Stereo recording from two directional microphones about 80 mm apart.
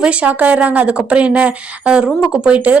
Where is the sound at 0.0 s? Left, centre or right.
Centre.